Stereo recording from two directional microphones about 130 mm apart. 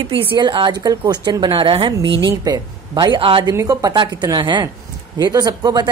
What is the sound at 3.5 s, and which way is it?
Speech, 25° right (ahead or behind).